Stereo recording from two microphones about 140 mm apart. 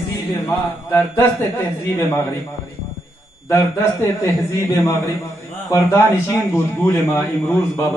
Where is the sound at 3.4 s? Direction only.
20° left (ahead or behind).